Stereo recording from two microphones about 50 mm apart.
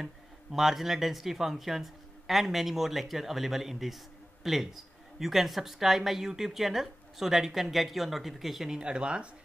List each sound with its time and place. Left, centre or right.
0.0 s speech: centre
8.6 s speech: centre